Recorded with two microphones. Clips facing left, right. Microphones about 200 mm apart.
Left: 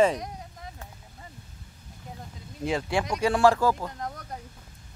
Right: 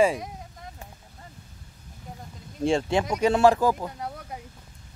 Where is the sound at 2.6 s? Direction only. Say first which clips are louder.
Right 4 dB; 25° right (ahead or behind).